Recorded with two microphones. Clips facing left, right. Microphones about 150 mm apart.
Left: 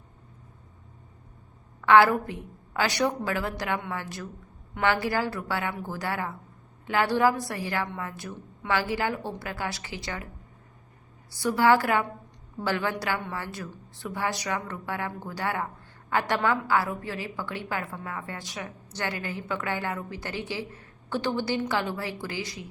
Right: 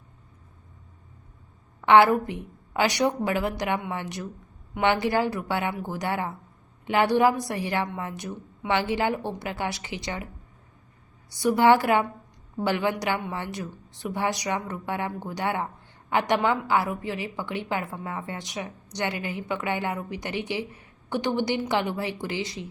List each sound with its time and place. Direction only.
1.8 s a woman's voice: 20° right (ahead or behind)
11.3 s a woman's voice: 20° right (ahead or behind)